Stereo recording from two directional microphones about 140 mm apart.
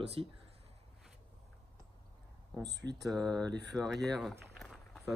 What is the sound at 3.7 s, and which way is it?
Speech, centre (ahead or behind).